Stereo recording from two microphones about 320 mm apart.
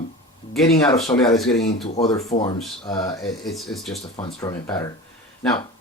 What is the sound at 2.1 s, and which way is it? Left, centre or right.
Speech, centre.